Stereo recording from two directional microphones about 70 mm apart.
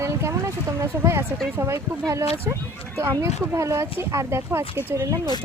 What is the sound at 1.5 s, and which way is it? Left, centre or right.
Speech, right.